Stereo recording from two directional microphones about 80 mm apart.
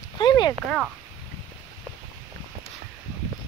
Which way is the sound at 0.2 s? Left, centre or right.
Left.